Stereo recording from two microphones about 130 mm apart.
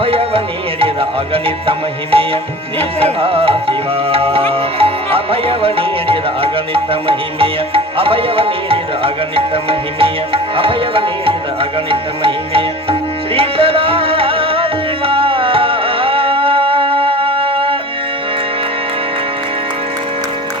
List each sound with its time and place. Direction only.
0.0 s music: 45° right (ahead or behind)